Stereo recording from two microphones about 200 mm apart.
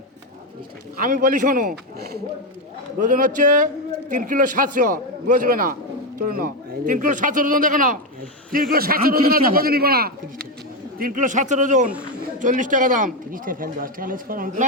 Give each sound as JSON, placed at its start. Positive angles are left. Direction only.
{"t": 0.9, "sound": "speech", "side_deg": -45}
{"t": 3.0, "sound": "speech", "side_deg": -40}